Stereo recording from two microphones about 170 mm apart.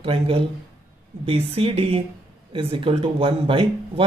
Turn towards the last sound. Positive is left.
turn(degrees=-30)  # may be behind; listen again after turning